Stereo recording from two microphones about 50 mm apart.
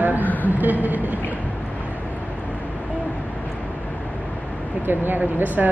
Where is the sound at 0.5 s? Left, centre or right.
Right.